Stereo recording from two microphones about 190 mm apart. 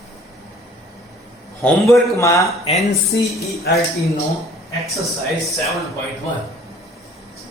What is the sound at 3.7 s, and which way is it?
Speech, 55° left (ahead or behind).